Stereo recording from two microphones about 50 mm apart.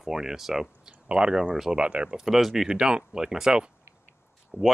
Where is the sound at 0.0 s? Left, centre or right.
Centre.